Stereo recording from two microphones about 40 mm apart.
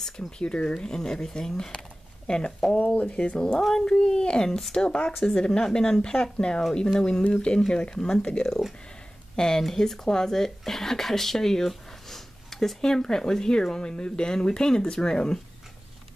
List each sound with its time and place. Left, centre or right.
0.4 s speech: left
0.8 s speech: centre; by 3.3 s left
3.5 s speech: centre
4.5 s speech: centre
4.7 s speech: left